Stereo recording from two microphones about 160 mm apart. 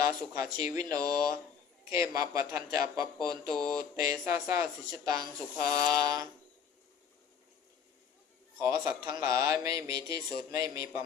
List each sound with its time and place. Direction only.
0.0 s speech: 20° right (ahead or behind)
8.5 s a man's voice: 20° right (ahead or behind)